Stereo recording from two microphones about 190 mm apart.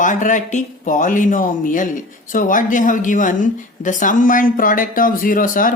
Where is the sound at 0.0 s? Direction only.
40° left (ahead or behind).